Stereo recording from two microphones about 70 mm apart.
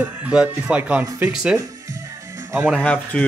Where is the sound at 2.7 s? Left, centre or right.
Centre.